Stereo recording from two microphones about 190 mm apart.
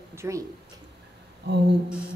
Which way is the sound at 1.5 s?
65° right (ahead or behind).